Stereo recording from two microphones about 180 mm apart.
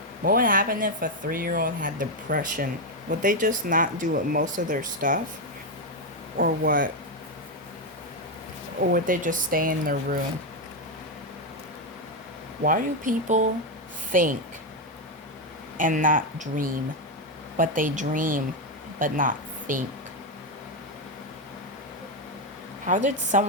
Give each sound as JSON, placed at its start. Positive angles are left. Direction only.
{"t": 0.3, "sound": "speech", "side_deg": -50}
{"t": 6.3, "sound": "speech", "side_deg": -55}
{"t": 8.9, "sound": "speech", "side_deg": -45}
{"t": 12.6, "sound": "speech", "side_deg": -50}
{"t": 15.8, "sound": "a woman's voice", "side_deg": -50}
{"t": 22.9, "sound": "speech", "side_deg": -45}